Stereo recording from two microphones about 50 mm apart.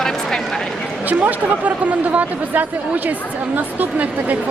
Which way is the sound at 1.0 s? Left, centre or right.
Right.